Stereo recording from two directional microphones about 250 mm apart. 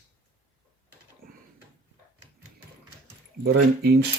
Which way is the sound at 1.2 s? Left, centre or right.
Right.